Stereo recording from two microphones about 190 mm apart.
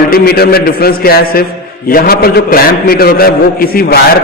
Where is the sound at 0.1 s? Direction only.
55° left (ahead or behind).